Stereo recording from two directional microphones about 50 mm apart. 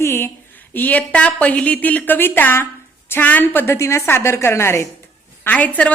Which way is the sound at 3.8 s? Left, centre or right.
Left.